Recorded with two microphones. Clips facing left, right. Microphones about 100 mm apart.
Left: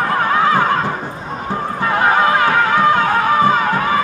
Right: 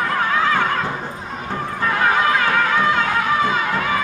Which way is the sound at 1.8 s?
30° left (ahead or behind).